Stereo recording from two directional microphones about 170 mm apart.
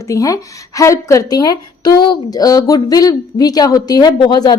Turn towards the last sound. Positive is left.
turn(degrees=25)  # may be behind; listen again after turning